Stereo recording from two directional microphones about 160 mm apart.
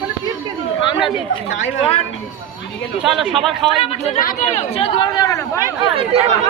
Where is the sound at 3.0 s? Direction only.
Centre (ahead or behind).